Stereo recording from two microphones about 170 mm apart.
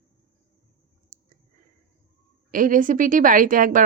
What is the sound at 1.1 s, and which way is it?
Clicking, 50° right (ahead or behind).